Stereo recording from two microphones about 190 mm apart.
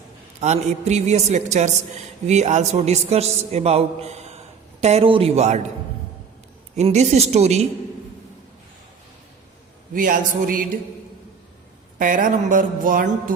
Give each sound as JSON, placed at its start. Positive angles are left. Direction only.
{"t": 0.3, "sound": "a woman's voice", "side_deg": -35}
{"t": 6.7, "sound": "a woman's voice", "side_deg": -35}
{"t": 9.9, "sound": "speech", "side_deg": -45}
{"t": 11.9, "sound": "speech", "side_deg": -45}